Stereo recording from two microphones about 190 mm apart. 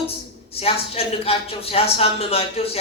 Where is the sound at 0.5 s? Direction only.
30° left (ahead or behind).